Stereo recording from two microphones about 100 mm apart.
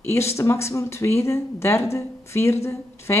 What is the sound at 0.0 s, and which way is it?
Speech, 25° left (ahead or behind).